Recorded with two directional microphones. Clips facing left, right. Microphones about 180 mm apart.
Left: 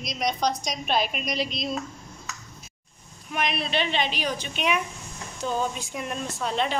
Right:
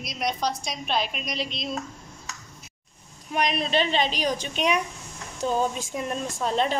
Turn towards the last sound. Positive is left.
turn(degrees=-40)  # may be behind; listen again after turning